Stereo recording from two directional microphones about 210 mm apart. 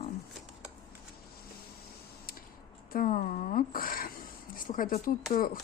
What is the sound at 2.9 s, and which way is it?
Speech, 40° left (ahead or behind).